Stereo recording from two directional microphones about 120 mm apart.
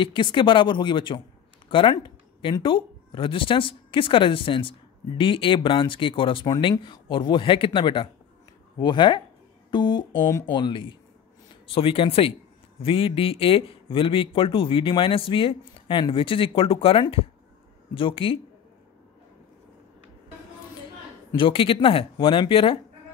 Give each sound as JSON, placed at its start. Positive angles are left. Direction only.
{"t": 0.0, "sound": "speech", "side_deg": 45}
{"t": 1.7, "sound": "a sound", "side_deg": 45}
{"t": 2.6, "sound": "speech", "side_deg": 45}
{"t": 21.4, "sound": "speech", "side_deg": 45}